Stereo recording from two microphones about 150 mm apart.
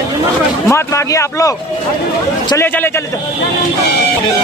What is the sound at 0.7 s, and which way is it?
Speech, 20° left (ahead or behind).